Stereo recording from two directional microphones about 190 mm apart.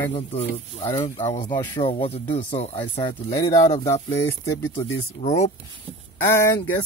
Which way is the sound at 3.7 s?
30° left (ahead or behind).